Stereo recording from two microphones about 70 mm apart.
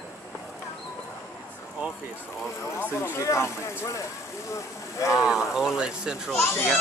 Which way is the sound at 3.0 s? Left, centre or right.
Left.